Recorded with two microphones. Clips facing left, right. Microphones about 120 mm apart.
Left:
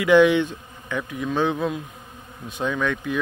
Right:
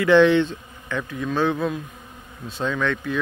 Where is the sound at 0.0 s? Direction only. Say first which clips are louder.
Right 1 dB; 15° left (ahead or behind).